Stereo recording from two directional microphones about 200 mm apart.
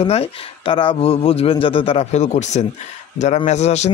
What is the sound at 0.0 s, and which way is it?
A man's voice, 30° left (ahead or behind).